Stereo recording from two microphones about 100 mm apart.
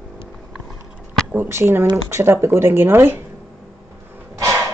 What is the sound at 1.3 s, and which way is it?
Speech, 25° right (ahead or behind).